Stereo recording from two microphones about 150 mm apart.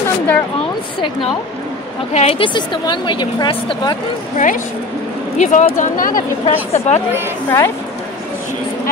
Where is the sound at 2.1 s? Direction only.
50° left (ahead or behind).